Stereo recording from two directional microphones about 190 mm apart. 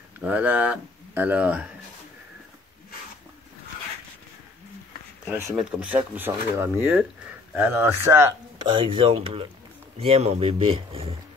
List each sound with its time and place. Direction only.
0.2 s speech: 10° right (ahead or behind)
5.5 s speech: 5° right (ahead or behind)
8.7 s speech: 25° right (ahead or behind)